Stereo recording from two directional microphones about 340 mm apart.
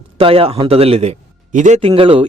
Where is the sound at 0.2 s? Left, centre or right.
Centre.